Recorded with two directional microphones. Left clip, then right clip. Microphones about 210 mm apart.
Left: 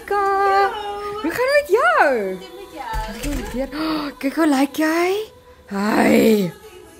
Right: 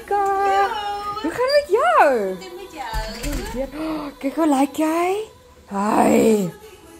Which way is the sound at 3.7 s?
35° left (ahead or behind).